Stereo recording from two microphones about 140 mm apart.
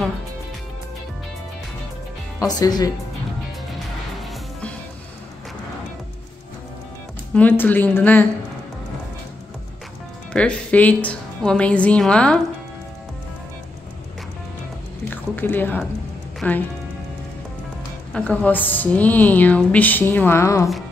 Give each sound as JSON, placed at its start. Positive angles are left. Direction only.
{"t": 2.4, "sound": "speech", "side_deg": 25}
{"t": 4.2, "sound": "music", "side_deg": 5}
{"t": 7.3, "sound": "a woman's voice", "side_deg": 10}
{"t": 10.3, "sound": "a woman's voice", "side_deg": 10}
{"t": 15.0, "sound": "speech", "side_deg": 15}
{"t": 16.3, "sound": "music", "side_deg": 10}
{"t": 18.1, "sound": "a woman's voice", "side_deg": 10}